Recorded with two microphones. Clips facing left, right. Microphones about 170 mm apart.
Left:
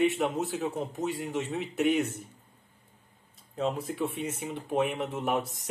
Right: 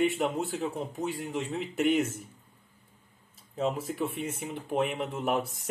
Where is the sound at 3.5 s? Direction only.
5° right (ahead or behind).